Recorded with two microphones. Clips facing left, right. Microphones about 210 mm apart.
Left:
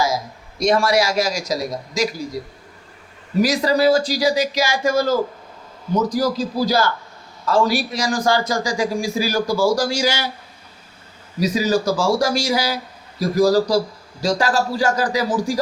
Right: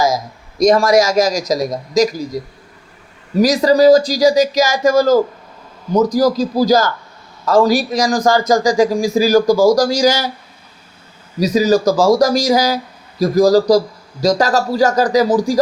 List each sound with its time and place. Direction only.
0.6 s a man's voice: 40° right (ahead or behind)
3.4 s speech: 40° right (ahead or behind)
11.3 s speech: 40° right (ahead or behind)